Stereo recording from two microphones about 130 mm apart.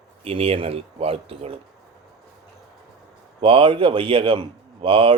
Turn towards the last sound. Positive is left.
turn(degrees=-45)  # may be behind; listen again after turning